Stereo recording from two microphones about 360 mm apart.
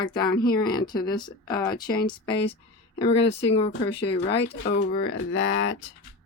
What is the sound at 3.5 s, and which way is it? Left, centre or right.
Speech, centre.